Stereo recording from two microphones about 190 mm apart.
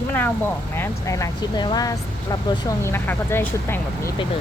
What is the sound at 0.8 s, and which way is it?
Speech, 15° left (ahead or behind).